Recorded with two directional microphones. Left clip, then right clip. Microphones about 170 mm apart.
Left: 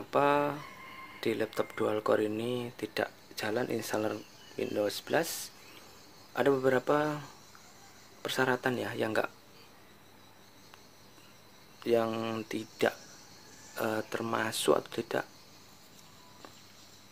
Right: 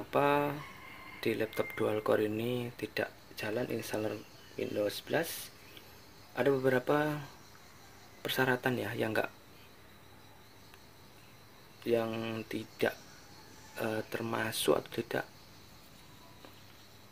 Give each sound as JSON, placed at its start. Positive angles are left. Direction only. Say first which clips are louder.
{"t": 0.1, "sound": "speech", "louder": "left 2 dB", "side_deg": 5}
{"t": 2.9, "sound": "speech", "louder": "left 4 dB", "side_deg": 20}
{"t": 11.8, "sound": "speech", "louder": "left 3 dB", "side_deg": 15}